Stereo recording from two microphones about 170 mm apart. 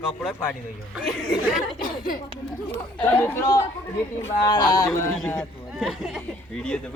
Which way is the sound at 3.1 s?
15° left (ahead or behind).